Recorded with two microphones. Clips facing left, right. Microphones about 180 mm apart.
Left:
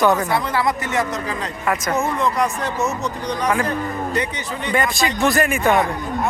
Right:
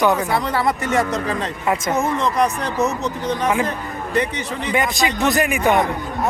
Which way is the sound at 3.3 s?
20° right (ahead or behind).